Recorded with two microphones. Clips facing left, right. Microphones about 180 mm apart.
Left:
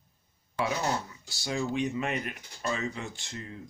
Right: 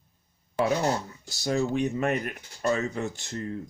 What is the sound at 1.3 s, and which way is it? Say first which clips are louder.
Speech: right 5 dB; 45° right (ahead or behind).